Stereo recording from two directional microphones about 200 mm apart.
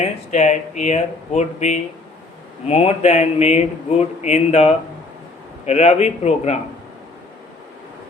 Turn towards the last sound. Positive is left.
turn(degrees=35)  # may be behind; listen again after turning